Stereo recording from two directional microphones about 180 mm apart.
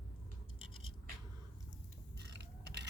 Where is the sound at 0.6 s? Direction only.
30° left (ahead or behind).